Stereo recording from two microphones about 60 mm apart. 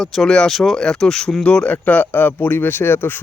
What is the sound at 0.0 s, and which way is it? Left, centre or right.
Speech, centre.